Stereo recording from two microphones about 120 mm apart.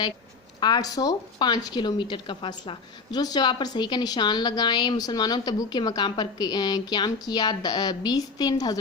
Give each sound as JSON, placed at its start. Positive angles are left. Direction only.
{"t": 0.6, "sound": "a woman's voice", "side_deg": 35}